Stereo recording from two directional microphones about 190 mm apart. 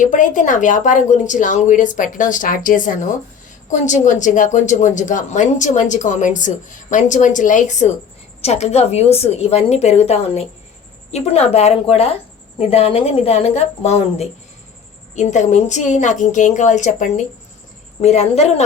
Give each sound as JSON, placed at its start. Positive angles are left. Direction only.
{"t": 0.0, "sound": "a woman's voice", "side_deg": 40}